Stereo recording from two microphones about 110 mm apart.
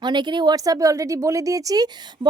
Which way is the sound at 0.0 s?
45° right (ahead or behind).